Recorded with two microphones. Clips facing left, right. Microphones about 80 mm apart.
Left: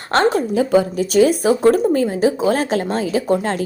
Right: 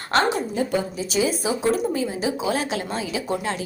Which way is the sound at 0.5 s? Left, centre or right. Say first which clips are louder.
Left 8 dB; left.